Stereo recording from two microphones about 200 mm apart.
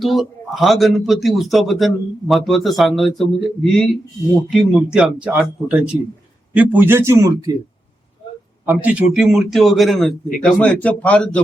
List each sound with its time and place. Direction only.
0.0 s a man's voice: centre (ahead or behind); by 7.5 s 15° right (ahead or behind)
8.6 s a man's voice: 10° right (ahead or behind); by 11.4 s 5° left (ahead or behind)